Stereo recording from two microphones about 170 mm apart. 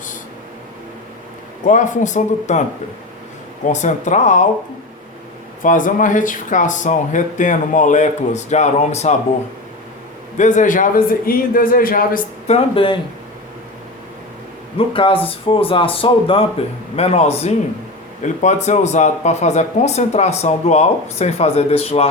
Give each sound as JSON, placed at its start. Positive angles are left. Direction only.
{"t": 1.6, "sound": "speech", "side_deg": 50}
{"t": 3.7, "sound": "speech", "side_deg": 45}
{"t": 5.6, "sound": "speech", "side_deg": 50}
{"t": 10.3, "sound": "a man's voice", "side_deg": 45}
{"t": 12.5, "sound": "speech", "side_deg": 35}
{"t": 14.9, "sound": "speech", "side_deg": 30}